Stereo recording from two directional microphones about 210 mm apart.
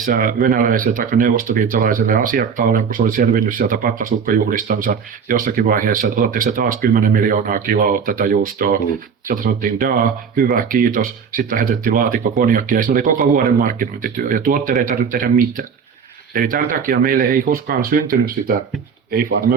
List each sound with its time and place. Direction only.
0.0 s speech: 40° right (ahead or behind)